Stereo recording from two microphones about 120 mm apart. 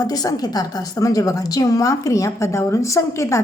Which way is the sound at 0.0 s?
30° left (ahead or behind).